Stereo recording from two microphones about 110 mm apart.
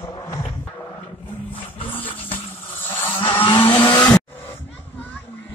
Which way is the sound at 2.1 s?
55° left (ahead or behind).